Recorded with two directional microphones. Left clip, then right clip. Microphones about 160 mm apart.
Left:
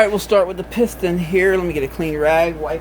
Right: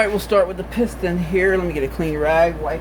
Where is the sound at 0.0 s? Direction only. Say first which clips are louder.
Left 2 dB; 35° left (ahead or behind).